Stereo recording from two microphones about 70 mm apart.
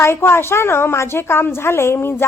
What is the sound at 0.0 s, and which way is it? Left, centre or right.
A woman's voice, left.